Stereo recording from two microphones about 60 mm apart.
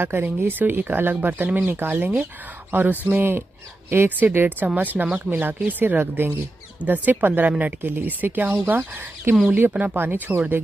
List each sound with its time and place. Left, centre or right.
0.0 s speech: right